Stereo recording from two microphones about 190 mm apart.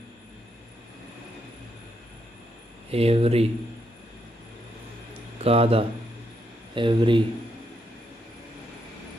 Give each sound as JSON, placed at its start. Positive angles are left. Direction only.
{"t": 2.9, "sound": "speech", "side_deg": -30}
{"t": 5.4, "sound": "speech", "side_deg": -30}